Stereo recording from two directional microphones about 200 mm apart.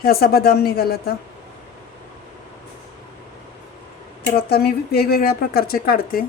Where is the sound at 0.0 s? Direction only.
50° left (ahead or behind).